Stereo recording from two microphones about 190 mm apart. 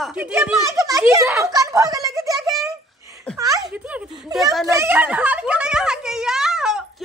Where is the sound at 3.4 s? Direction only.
20° right (ahead or behind).